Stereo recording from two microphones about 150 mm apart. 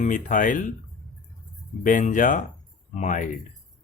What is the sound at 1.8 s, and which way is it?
Speech, 60° left (ahead or behind).